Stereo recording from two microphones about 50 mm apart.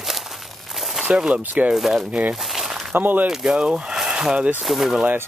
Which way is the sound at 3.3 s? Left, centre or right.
Centre.